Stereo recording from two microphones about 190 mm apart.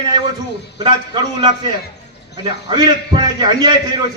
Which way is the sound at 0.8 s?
25° right (ahead or behind).